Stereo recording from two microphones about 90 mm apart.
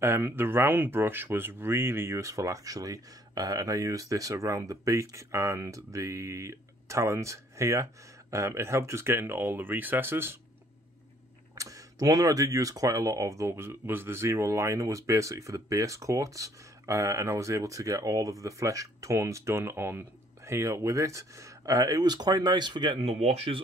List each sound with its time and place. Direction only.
0.0 s speech: 25° right (ahead or behind)
11.5 s speech: 40° right (ahead or behind); by 23.6 s 90° right